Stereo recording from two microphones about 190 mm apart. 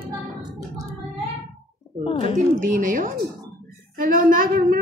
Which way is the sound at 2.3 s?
45° right (ahead or behind).